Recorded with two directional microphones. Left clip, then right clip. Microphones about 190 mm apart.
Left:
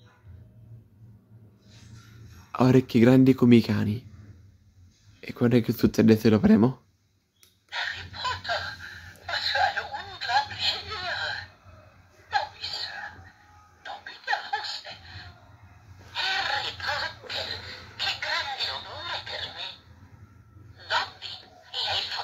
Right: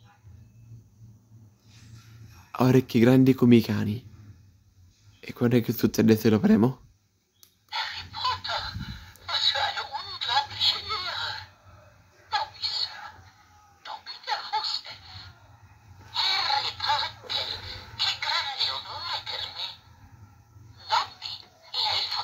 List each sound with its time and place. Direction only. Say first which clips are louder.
2.5 s speech: left 1 dB; centre (ahead or behind)
5.2 s speech: left 1 dB; centre (ahead or behind)
7.7 s a sound: even; 10° right (ahead or behind)
13.8 s laughter: left 2 dB; 10° right (ahead or behind)
16.1 s creak: right 2 dB; 10° right (ahead or behind)
20.8 s a sound: right 2 dB; 5° right (ahead or behind)